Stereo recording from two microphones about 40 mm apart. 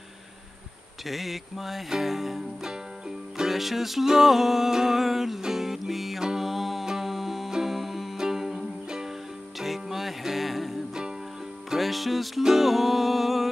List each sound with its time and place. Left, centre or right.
1.0 s music: centre
8.8 s music: centre
9.6 s music: centre